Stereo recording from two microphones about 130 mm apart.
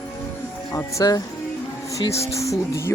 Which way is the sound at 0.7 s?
25° left (ahead or behind).